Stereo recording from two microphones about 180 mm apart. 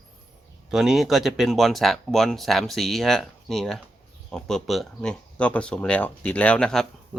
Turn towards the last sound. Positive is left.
turn(degrees=5)  # may be behind; listen again after turning